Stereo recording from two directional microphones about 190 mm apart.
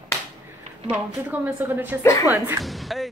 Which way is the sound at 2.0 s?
15° left (ahead or behind).